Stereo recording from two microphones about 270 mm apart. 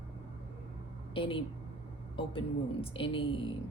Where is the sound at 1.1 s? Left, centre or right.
Centre.